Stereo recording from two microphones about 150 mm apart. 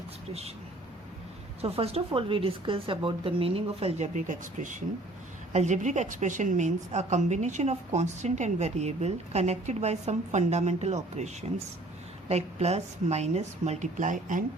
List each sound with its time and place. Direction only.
1.6 s a woman's voice: 40° right (ahead or behind); by 14.4 s 60° right (ahead or behind)